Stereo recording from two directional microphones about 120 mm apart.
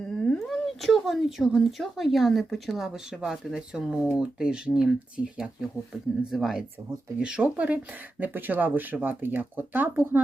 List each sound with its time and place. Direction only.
0.0 s speech: 5° left (ahead or behind); by 10.2 s 15° right (ahead or behind)